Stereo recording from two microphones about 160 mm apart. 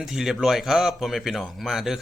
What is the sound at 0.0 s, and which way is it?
Speech, centre (ahead or behind).